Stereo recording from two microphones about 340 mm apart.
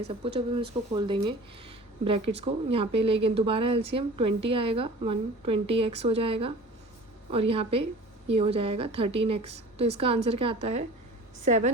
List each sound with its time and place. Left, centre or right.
0.3 s a woman's voice: centre